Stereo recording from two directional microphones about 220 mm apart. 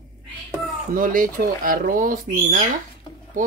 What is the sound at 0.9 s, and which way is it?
Speech, 40° right (ahead or behind).